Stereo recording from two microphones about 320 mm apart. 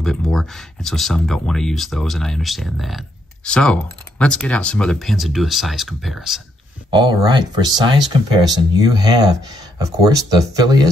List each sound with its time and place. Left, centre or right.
0.0 s speech: centre
6.9 s speech: centre